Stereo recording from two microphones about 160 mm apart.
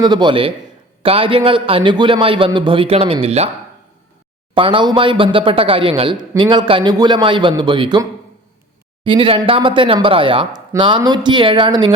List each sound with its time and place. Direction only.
0.0 s a man's voice: 30° right (ahead or behind)
4.5 s a man's voice: 30° right (ahead or behind)
9.0 s a man's voice: 35° right (ahead or behind)